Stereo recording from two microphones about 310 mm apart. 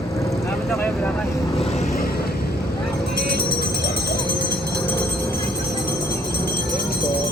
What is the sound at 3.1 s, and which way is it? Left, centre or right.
Vehicle, right.